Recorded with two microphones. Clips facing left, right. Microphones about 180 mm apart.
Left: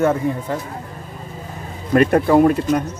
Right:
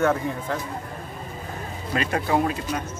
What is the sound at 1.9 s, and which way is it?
Speech, 55° left (ahead or behind).